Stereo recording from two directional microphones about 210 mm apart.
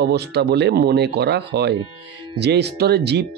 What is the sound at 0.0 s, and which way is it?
Speech, 50° right (ahead or behind).